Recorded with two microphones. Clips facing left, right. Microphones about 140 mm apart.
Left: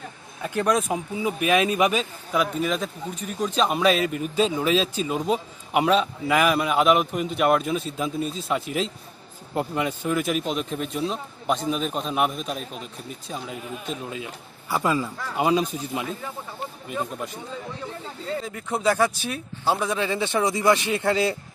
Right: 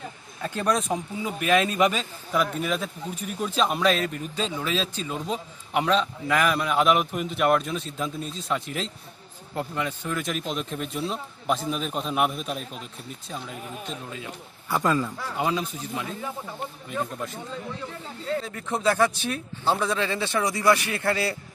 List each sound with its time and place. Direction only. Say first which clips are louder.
0.4 s speech: left 4 dB; 15° left (ahead or behind)
0.7 s a man's voice: left 1 dB; 5° left (ahead or behind)
1.1 s a man's voice: left 1 dB; 15° left (ahead or behind)
2.3 s a man's voice: left 2 dB; centre (ahead or behind)
14.7 s a man's voice: even; 5° left (ahead or behind)
18.4 s a man's voice: left 3 dB; 10° left (ahead or behind)